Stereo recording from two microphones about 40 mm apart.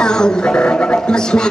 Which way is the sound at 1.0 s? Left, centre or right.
Centre.